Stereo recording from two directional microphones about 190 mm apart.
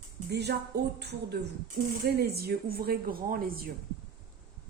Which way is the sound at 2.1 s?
55° right (ahead or behind).